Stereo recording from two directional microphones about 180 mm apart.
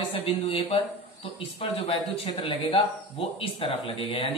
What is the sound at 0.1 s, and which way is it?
Speech, 30° left (ahead or behind).